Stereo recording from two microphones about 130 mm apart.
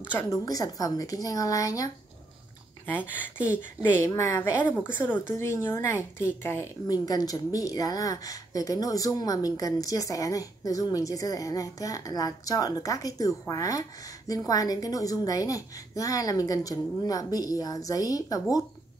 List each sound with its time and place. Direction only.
0.1 s a woman's voice: 20° left (ahead or behind)
4.0 s a woman's voice: 20° left (ahead or behind)
6.9 s a woman's voice: 30° left (ahead or behind)